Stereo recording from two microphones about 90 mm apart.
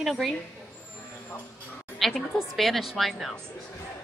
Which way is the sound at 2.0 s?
Centre (ahead or behind).